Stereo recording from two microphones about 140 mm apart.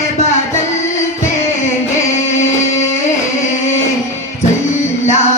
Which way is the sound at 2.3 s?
55° left (ahead or behind).